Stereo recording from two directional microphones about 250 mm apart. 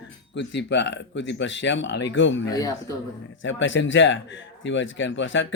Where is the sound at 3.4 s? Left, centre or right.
Left.